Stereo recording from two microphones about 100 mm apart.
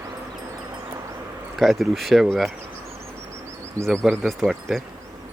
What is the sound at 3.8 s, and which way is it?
Speech, 5° left (ahead or behind).